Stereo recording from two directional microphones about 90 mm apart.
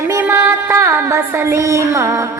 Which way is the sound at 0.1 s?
30° right (ahead or behind).